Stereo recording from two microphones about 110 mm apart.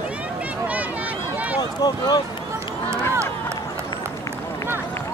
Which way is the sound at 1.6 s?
40° left (ahead or behind).